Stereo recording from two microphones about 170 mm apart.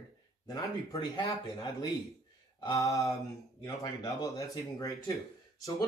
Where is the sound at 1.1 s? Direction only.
25° left (ahead or behind).